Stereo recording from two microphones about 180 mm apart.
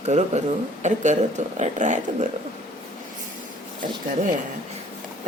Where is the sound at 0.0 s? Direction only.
40° right (ahead or behind).